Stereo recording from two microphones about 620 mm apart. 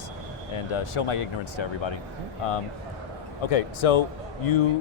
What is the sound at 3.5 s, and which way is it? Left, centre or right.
Speech, left.